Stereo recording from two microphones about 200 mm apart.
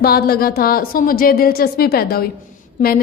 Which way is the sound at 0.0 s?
50° left (ahead or behind).